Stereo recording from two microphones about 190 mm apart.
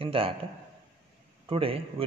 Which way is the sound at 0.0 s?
30° right (ahead or behind).